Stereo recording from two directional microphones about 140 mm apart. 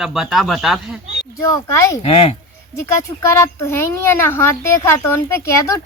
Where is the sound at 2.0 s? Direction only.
45° left (ahead or behind).